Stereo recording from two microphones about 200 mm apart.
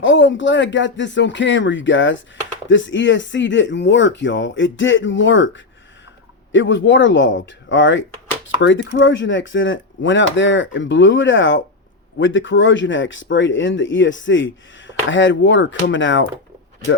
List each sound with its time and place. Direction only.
0.0 s speech: 65° left (ahead or behind)